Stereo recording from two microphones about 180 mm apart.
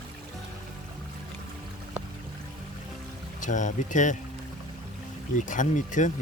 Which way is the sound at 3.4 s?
45° left (ahead or behind).